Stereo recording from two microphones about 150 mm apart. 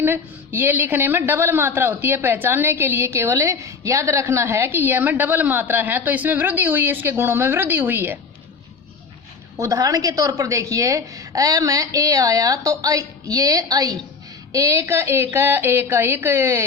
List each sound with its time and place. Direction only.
0.0 s a woman's voice: 15° right (ahead or behind)
9.6 s a woman's voice: 20° right (ahead or behind)